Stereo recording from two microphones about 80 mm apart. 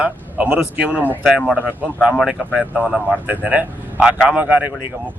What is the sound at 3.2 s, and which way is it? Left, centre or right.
A man's voice, centre.